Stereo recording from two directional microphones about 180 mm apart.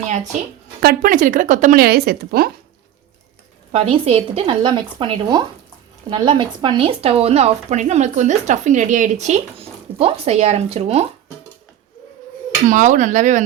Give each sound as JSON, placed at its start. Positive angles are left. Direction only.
{"t": 0.8, "sound": "speech", "side_deg": -55}
{"t": 3.7, "sound": "speech", "side_deg": -35}
{"t": 12.6, "sound": "speech", "side_deg": -45}